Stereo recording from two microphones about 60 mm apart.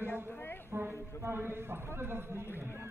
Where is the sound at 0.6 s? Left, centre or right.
Right.